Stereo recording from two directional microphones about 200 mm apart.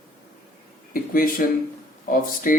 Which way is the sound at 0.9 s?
45° left (ahead or behind).